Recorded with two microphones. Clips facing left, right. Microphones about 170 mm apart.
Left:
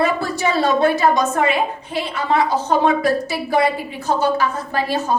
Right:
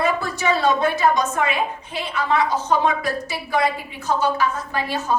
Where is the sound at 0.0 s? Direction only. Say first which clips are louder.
Left 3 dB; 35° left (ahead or behind).